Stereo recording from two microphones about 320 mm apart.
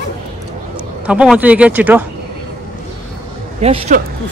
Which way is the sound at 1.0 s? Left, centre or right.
Centre.